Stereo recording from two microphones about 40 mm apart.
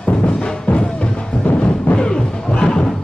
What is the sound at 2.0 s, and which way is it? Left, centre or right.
Music, left.